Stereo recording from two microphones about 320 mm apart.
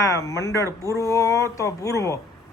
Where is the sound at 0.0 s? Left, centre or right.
Centre.